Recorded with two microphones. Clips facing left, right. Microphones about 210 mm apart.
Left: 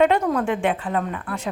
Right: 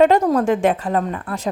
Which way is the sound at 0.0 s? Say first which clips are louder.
Right 4 dB; 40° right (ahead or behind).